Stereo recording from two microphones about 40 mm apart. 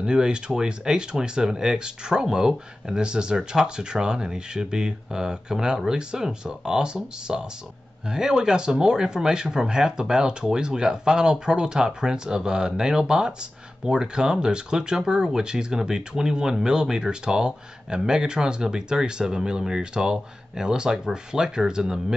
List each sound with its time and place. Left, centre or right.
0.0 s speech: centre